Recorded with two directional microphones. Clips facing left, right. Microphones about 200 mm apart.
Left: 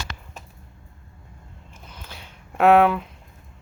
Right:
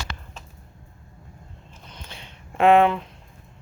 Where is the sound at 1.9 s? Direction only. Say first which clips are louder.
Even; 5° left (ahead or behind).